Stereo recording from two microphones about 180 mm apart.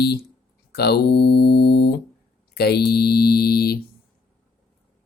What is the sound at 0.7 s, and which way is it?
Speech, 65° left (ahead or behind).